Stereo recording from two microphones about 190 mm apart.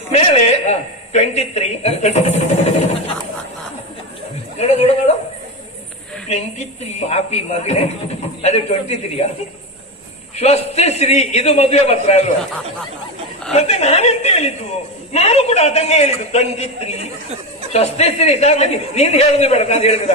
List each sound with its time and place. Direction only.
0.1 s a woman's voice: 30° left (ahead or behind)
4.5 s a woman's voice: 35° left (ahead or behind)
6.9 s a man's voice: 35° left (ahead or behind)
10.3 s a man's voice: 35° left (ahead or behind)
13.5 s a man's voice: 35° left (ahead or behind)